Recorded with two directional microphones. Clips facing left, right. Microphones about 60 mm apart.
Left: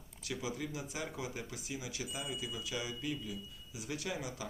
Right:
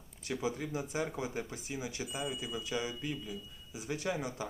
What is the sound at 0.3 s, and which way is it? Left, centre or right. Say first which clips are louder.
A man's voice: right 4 dB; right.